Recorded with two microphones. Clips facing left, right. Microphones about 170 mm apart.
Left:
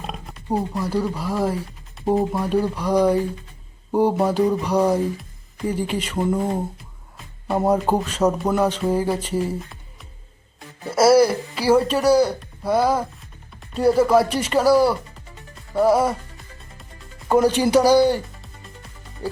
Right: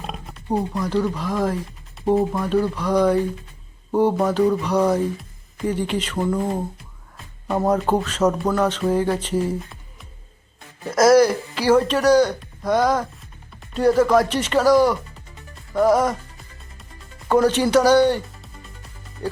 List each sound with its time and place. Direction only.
0.0 s music: centre (ahead or behind)
0.5 s speech: 5° left (ahead or behind)
2.0 s music: centre (ahead or behind)
2.4 s speech: 10° left (ahead or behind)
10.9 s speech: 10° left (ahead or behind)
15.5 s music: 10° left (ahead or behind)
17.2 s speech: 10° left (ahead or behind)
18.4 s music: centre (ahead or behind)